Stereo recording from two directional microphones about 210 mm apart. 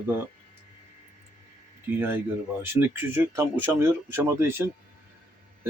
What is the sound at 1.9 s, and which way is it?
Speech, 10° right (ahead or behind).